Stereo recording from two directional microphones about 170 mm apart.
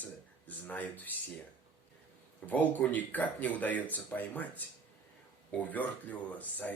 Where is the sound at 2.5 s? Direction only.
10° left (ahead or behind).